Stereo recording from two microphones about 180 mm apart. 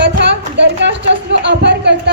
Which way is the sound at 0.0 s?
75° right (ahead or behind).